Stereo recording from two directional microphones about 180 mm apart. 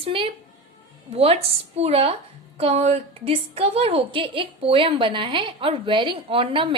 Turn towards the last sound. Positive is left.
turn(degrees=-30)  # may be behind; listen again after turning